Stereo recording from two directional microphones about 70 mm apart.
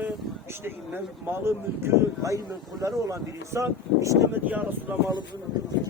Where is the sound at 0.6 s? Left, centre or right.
Right.